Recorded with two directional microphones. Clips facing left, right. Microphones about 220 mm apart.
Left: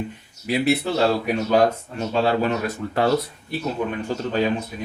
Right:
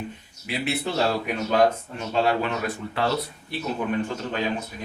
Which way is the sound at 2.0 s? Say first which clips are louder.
Left 3 dB; 40° left (ahead or behind).